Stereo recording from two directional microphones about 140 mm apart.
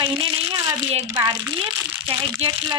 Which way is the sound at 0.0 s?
35° right (ahead or behind).